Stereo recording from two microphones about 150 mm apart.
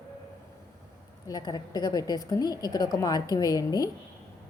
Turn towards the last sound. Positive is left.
turn(degrees=25)  # may be behind; listen again after turning